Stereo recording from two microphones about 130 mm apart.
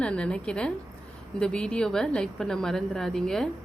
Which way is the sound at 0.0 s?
10° left (ahead or behind).